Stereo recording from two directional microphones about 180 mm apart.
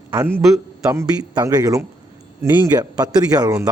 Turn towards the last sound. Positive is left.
turn(degrees=-20)  # may be behind; listen again after turning